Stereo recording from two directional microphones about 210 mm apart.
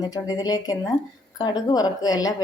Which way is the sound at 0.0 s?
20° left (ahead or behind).